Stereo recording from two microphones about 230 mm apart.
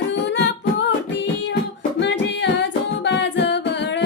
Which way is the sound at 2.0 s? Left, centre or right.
Left.